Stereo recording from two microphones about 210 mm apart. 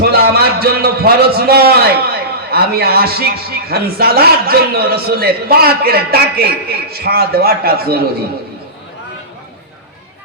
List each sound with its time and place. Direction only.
0.0 s a man's voice: 50° right (ahead or behind)